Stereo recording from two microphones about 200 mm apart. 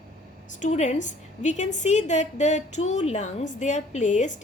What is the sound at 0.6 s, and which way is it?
A woman's voice, 35° left (ahead or behind).